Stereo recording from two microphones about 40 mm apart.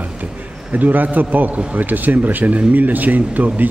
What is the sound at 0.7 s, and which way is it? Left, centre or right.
Speech, right.